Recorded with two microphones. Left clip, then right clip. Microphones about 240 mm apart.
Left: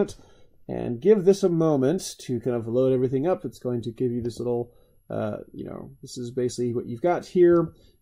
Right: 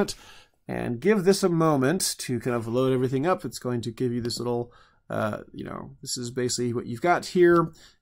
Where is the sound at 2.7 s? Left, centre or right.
Right.